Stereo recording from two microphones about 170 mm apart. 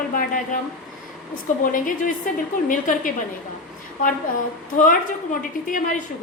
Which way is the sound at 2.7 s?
50° left (ahead or behind).